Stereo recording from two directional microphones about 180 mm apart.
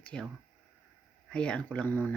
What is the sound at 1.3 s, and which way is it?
Speech, 5° left (ahead or behind).